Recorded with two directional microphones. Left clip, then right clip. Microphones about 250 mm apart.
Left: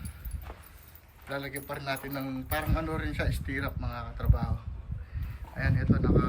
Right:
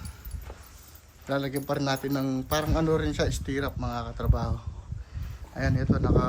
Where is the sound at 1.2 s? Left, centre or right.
Centre.